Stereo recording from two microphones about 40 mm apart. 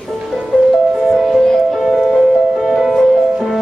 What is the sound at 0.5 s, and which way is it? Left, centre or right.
Music, left.